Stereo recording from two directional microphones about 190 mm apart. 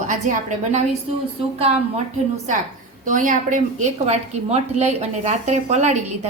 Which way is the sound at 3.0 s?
45° right (ahead or behind).